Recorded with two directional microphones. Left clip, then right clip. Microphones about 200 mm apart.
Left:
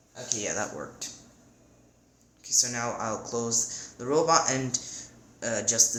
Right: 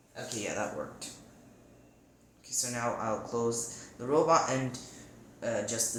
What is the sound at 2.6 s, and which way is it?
Speech, 45° left (ahead or behind).